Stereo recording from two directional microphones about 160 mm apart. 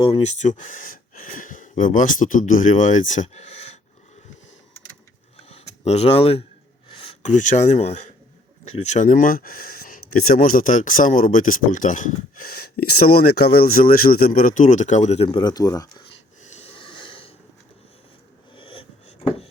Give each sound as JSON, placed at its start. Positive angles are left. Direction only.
{"t": 0.0, "sound": "speech", "side_deg": 40}
{"t": 5.8, "sound": "speech", "side_deg": 40}
{"t": 16.4, "sound": "snort", "side_deg": 45}
{"t": 18.5, "sound": "a sound", "side_deg": 35}